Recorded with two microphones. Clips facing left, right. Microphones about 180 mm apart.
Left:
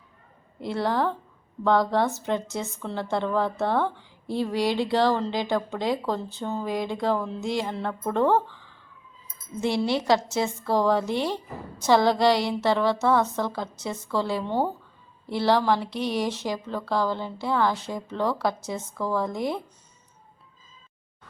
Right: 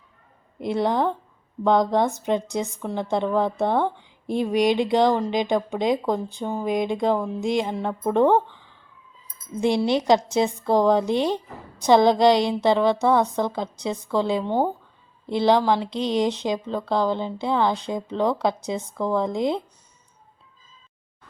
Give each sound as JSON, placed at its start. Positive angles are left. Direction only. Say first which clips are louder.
{"t": 0.6, "sound": "a woman's voice", "louder": "right 3 dB", "side_deg": -20}